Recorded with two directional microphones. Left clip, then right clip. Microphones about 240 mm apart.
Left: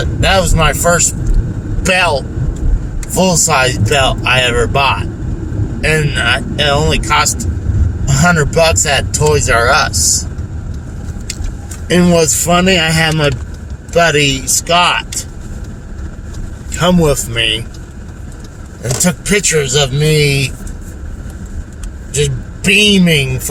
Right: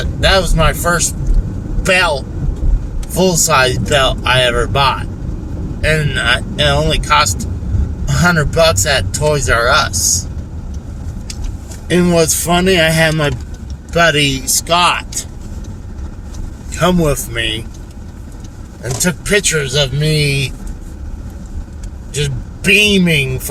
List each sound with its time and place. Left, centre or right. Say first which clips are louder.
0.0 s speech: left 1 dB; centre
3.2 s speech: even; centre
11.9 s speech: left 2 dB; centre
16.7 s speech: left 2 dB; centre
18.8 s speech: left 2 dB; centre
22.1 s speech: left 5 dB; centre